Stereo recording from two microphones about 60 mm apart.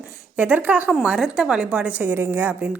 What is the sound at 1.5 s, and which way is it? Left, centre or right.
Speech, right.